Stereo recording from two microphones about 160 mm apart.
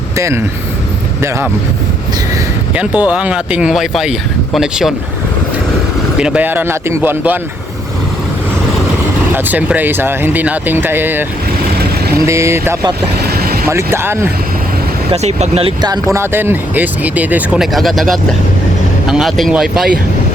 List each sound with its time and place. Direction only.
0.2 s speech: 20° right (ahead or behind)
2.7 s speech: 10° right (ahead or behind)
6.1 s speech: 5° right (ahead or behind)
9.3 s speech: 10° right (ahead or behind)
13.2 s vehicle: 75° right (ahead or behind)
13.7 s speech: 15° right (ahead or behind)
15.1 s speech: 45° right (ahead or behind)
16.1 s speech: 15° right (ahead or behind)